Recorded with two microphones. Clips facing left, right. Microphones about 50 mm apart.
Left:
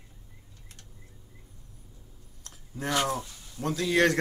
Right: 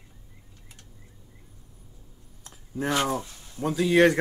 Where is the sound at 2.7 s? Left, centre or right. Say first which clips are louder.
Right 3 dB; centre.